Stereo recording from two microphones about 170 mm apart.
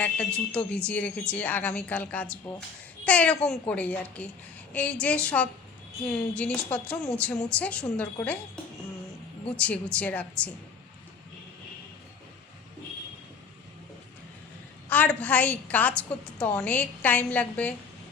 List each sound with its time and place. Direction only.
0.0 s a woman's voice: 5° left (ahead or behind)
9.6 s a woman's voice: 5° left (ahead or behind)
14.8 s a woman's voice: 10° left (ahead or behind)